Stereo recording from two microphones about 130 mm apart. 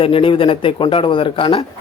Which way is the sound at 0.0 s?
45° left (ahead or behind).